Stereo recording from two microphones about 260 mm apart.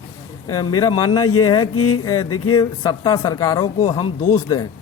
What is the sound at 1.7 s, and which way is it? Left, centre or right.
Mantra, left.